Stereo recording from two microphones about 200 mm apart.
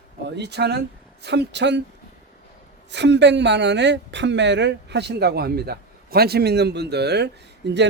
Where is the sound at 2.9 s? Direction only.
60° right (ahead or behind).